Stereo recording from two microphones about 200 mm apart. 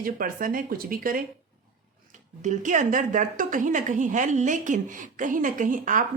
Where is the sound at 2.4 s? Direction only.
40° right (ahead or behind).